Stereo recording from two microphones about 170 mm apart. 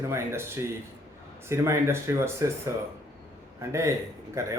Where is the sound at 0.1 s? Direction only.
15° right (ahead or behind).